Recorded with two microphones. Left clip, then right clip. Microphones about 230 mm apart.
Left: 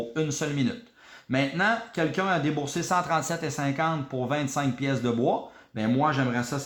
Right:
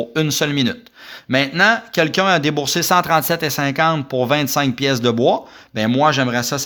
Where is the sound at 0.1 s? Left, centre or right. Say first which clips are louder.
Right 10 dB; right.